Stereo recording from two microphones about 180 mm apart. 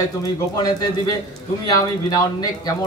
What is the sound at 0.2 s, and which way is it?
Speech, 20° left (ahead or behind).